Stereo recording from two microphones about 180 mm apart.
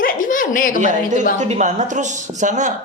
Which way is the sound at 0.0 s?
50° left (ahead or behind).